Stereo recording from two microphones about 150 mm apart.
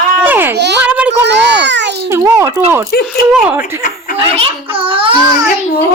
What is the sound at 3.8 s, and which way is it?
Speech, 75° left (ahead or behind).